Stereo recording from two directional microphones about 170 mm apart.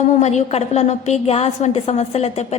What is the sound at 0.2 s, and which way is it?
A woman's voice, 40° left (ahead or behind).